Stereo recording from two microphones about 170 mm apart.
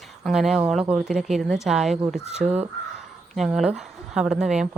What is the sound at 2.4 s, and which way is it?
Speech, 40° right (ahead or behind).